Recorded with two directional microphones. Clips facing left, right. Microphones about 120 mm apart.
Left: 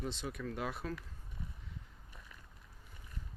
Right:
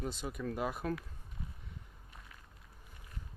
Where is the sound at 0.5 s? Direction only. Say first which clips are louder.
Right 5 dB; 5° right (ahead or behind).